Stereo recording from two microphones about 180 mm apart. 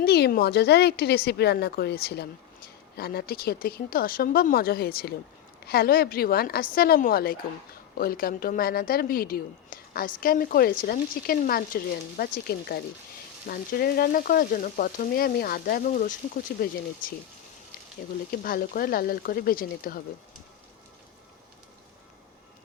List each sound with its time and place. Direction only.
0.0 s speech: 60° left (ahead or behind)
13.5 s frying: 55° left (ahead or behind)
18.3 s speech: 55° left (ahead or behind)